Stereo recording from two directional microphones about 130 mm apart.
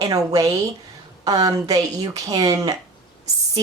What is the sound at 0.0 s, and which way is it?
Speech, 25° right (ahead or behind).